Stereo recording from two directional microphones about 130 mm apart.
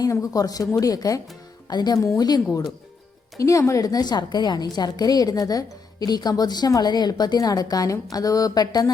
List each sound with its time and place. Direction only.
0.0 s a woman's voice: 25° left (ahead or behind)